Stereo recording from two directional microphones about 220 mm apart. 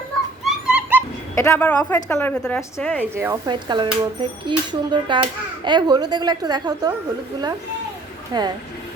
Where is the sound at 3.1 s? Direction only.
10° right (ahead or behind).